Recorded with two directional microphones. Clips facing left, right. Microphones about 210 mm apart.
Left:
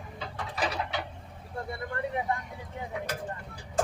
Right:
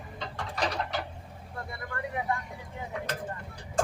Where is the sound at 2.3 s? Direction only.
20° left (ahead or behind).